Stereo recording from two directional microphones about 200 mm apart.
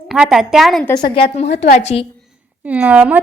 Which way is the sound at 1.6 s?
45° left (ahead or behind).